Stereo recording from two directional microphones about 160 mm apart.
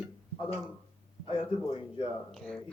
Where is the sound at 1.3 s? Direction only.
35° left (ahead or behind).